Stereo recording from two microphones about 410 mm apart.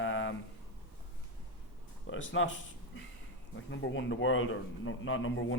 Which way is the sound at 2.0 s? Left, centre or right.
Left.